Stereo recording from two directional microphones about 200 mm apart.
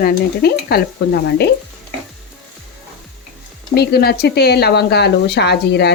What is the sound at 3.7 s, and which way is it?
Speech, 50° left (ahead or behind).